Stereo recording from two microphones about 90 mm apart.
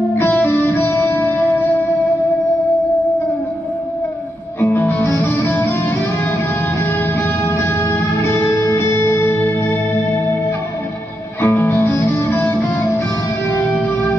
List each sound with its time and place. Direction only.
0.2 s music: 25° left (ahead or behind)
4.6 s music: 20° left (ahead or behind)
11.4 s music: 25° left (ahead or behind)